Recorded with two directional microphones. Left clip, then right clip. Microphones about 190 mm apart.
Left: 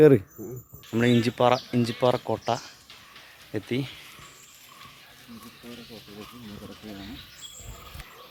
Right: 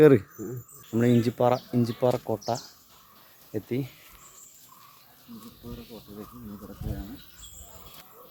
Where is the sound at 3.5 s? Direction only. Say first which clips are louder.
Left 1 dB; 10° left (ahead or behind).